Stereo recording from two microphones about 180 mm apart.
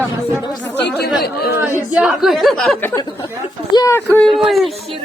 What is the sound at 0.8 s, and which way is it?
Speech, 65° left (ahead or behind).